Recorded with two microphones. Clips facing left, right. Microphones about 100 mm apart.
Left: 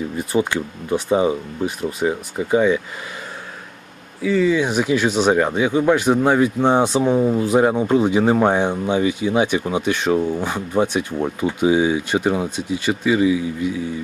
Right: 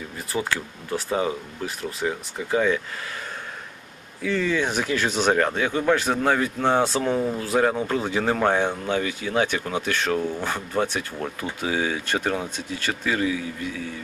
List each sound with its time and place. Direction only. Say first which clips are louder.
0.2 s speech: left 6 dB; 20° left (ahead or behind)
4.2 s speech: left 6 dB; 5° left (ahead or behind)